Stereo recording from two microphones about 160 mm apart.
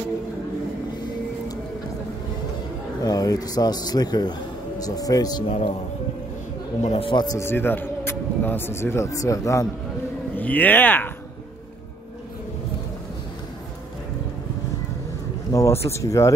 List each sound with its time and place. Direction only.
3.0 s a man's voice: 25° left (ahead or behind)
5.5 s speech: 35° left (ahead or behind)
6.8 s speech: 35° left (ahead or behind); by 11.1 s 10° left (ahead or behind)
15.5 s speech: 15° left (ahead or behind)